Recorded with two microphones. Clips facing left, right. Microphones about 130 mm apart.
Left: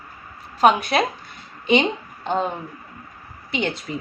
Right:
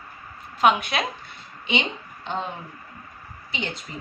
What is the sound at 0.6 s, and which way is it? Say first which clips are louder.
Speech: left 4 dB; 40° left (ahead or behind).